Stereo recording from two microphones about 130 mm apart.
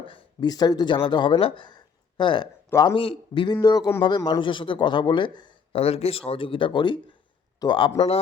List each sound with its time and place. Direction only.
0.0 s speech: 40° left (ahead or behind)
5.7 s speech: 50° left (ahead or behind)